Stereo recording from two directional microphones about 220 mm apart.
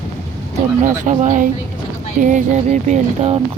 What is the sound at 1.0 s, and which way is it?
Speech, 35° right (ahead or behind).